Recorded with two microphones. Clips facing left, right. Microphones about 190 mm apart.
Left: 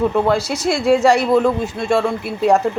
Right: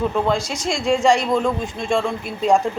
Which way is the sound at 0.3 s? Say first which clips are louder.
Left 4 dB; 5° left (ahead or behind).